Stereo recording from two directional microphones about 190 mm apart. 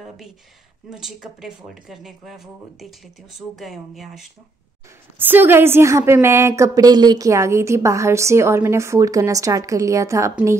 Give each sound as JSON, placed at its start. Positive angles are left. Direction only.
{"t": 0.8, "sound": "a woman's voice", "side_deg": -5}